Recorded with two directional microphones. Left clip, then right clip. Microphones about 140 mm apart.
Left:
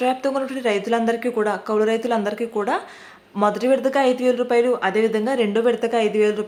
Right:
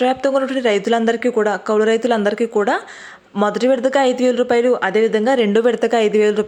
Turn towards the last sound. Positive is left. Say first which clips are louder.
# right 4 dB
turn(degrees=-35)  # may be behind; listen again after turning